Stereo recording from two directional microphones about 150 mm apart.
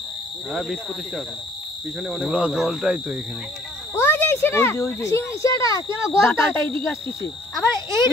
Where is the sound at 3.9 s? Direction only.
15° left (ahead or behind).